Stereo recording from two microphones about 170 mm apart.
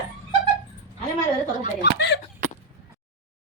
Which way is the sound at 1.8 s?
90° left.